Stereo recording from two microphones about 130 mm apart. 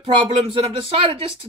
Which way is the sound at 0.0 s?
45° right (ahead or behind).